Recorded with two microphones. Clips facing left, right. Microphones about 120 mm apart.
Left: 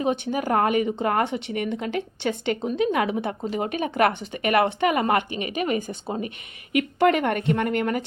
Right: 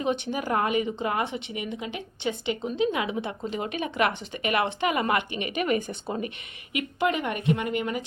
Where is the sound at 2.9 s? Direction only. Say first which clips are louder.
Left 5 dB; 45° left (ahead or behind).